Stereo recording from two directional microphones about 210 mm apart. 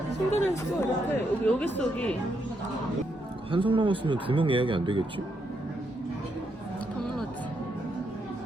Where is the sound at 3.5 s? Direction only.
25° right (ahead or behind).